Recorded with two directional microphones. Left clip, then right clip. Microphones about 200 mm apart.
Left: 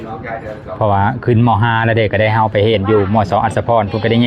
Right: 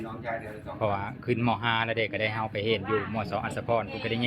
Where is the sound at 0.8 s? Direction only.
15° left (ahead or behind).